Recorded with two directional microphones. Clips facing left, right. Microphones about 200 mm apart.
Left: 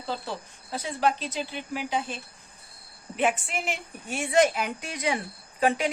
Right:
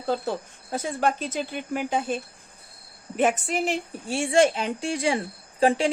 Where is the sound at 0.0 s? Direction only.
50° right (ahead or behind).